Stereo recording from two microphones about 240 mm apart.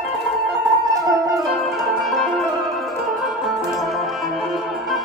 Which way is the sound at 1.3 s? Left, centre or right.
Centre.